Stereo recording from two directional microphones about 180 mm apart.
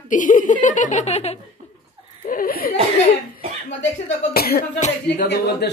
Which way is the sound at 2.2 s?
50° left (ahead or behind).